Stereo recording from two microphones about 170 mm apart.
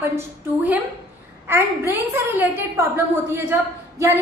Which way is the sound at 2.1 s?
15° right (ahead or behind).